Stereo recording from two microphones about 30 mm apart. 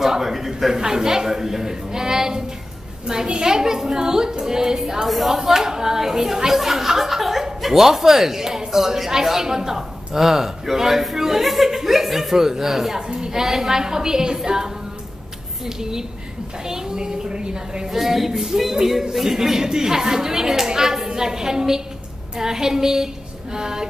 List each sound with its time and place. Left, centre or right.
0.0 s speech: centre
5.0 s speech: centre
5.4 s speech: centre
17.8 s speech: centre